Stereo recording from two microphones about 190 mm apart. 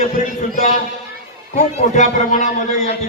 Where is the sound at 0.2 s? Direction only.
40° left (ahead or behind).